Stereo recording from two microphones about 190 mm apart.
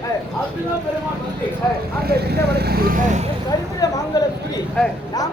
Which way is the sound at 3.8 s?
20° left (ahead or behind).